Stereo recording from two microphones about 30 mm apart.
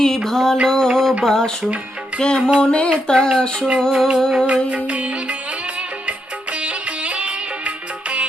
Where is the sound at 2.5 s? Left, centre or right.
Left.